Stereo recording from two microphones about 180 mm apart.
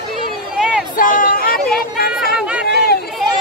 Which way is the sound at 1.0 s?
50° left (ahead or behind).